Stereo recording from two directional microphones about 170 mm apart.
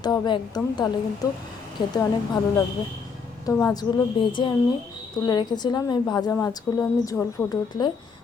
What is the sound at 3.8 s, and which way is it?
A woman's voice, 25° left (ahead or behind).